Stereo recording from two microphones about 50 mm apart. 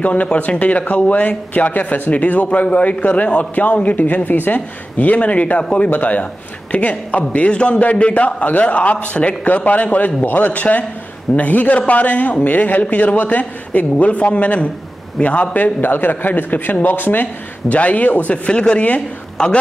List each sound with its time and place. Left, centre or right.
0.0 s a man's voice: left
17.6 s a man's voice: left